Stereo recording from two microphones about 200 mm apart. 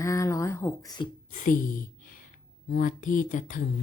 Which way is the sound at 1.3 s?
40° left (ahead or behind).